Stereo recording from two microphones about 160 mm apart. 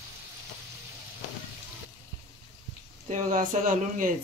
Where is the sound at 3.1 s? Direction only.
50° right (ahead or behind).